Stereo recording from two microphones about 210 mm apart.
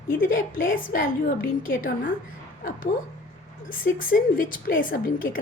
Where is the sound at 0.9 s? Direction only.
40° left (ahead or behind).